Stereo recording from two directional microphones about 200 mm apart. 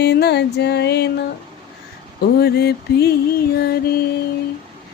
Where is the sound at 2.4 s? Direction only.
55° left (ahead or behind).